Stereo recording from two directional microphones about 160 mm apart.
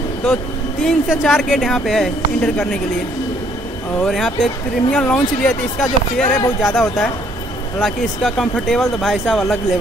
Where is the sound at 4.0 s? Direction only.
Centre (ahead or behind).